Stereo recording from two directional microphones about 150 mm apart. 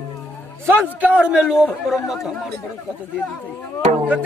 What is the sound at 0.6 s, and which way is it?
Speech, 15° right (ahead or behind).